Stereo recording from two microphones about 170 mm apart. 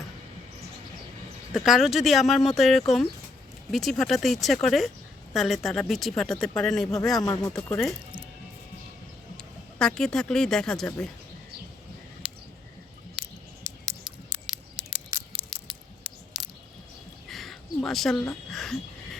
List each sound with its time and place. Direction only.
1.5 s speech: centre (ahead or behind)
7.2 s speech: 20° left (ahead or behind)
9.4 s speech: 5° left (ahead or behind)
12.2 s a sound: 5° right (ahead or behind)
13.2 s scissors: 5° right (ahead or behind)
13.7 s scissors: 25° right (ahead or behind)
15.5 s a sound: centre (ahead or behind)
17.2 s a sound: centre (ahead or behind)
18.5 s speech: centre (ahead or behind)